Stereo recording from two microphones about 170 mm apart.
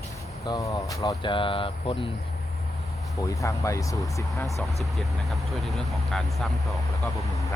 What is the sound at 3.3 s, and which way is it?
Speech, 20° left (ahead or behind).